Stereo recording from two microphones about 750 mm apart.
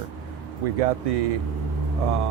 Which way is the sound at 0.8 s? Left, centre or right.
Right.